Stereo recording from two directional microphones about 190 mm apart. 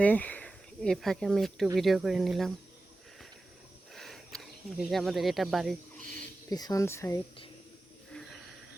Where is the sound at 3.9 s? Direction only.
Centre (ahead or behind).